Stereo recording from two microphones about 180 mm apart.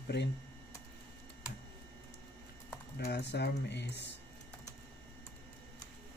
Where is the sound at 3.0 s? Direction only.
70° left (ahead or behind).